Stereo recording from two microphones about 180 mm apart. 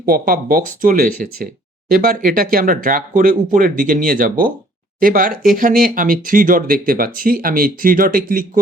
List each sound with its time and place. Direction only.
0.0 s speech: 50° right (ahead or behind)